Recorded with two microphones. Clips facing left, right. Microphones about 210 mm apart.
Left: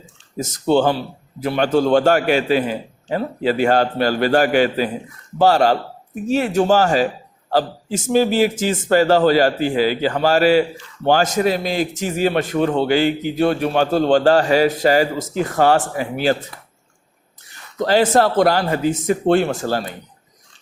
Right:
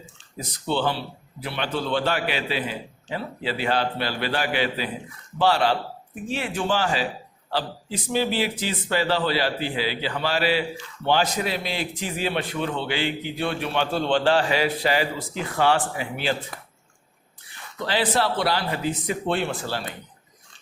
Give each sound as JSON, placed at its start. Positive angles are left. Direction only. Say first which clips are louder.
{"t": 0.3, "sound": "a man's voice", "louder": "left 10 dB", "side_deg": 45}
{"t": 17.7, "sound": "a man's voice", "louder": "left 9 dB", "side_deg": 45}